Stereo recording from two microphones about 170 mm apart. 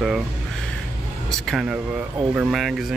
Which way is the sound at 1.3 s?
Centre (ahead or behind).